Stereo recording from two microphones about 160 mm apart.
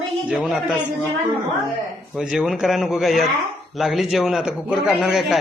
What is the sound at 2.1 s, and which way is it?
A man's voice, 5° right (ahead or behind).